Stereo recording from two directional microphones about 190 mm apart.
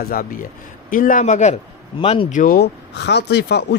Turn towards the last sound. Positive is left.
turn(degrees=60)  # may be behind; listen again after turning